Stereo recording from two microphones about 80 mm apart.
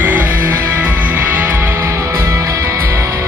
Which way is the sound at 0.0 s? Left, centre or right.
Right.